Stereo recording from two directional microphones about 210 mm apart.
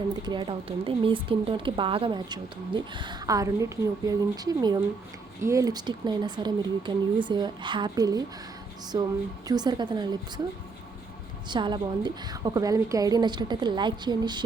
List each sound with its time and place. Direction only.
0.1 s speech: 20° right (ahead or behind)
9.5 s speech: 20° right (ahead or behind)
11.4 s speech: 20° right (ahead or behind)